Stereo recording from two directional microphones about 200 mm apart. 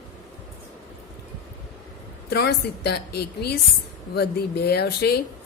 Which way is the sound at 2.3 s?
55° left (ahead or behind).